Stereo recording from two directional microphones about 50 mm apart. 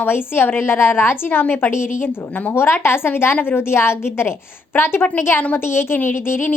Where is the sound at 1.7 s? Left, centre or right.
Left.